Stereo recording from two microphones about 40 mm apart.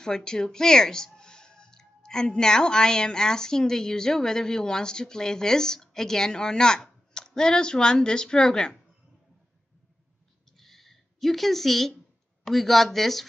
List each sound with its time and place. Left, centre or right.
0.0 s speech: centre
10.6 s a sound: centre
12.4 s speech: centre